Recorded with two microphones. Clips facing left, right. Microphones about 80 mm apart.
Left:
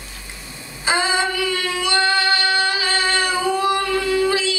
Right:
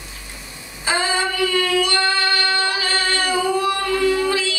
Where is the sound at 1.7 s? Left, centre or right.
Left.